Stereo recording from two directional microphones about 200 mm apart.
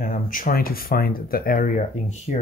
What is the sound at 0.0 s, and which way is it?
Speech, 40° left (ahead or behind).